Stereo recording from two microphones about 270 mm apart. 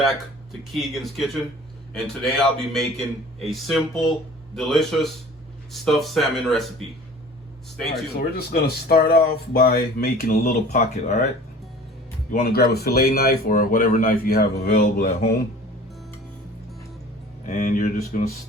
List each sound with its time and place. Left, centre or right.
0.7 s a man's voice: centre
7.8 s a man's voice: centre
8.1 s speech: left
12.3 s speech: left
17.4 s speech: left